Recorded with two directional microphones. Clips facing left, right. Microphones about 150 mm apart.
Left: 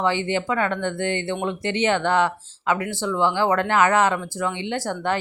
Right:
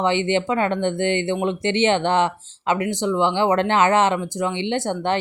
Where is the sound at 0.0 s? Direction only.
20° right (ahead or behind).